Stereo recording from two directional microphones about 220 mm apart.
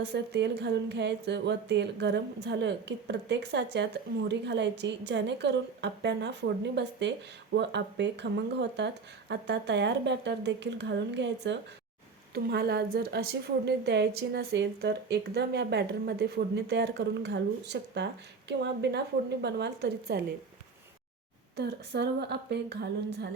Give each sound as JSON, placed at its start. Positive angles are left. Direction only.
{"t": 0.0, "sound": "a woman's voice", "side_deg": -50}
{"t": 21.5, "sound": "a woman's voice", "side_deg": -50}